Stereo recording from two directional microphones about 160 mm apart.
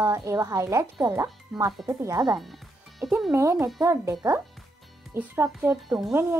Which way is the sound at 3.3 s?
20° right (ahead or behind).